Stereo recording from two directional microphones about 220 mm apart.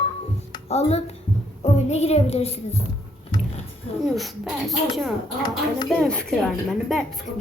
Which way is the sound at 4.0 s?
Centre (ahead or behind).